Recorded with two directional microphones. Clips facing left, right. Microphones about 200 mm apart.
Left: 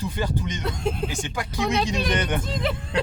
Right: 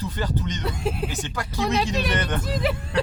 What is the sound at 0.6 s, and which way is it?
Speech, 5° right (ahead or behind).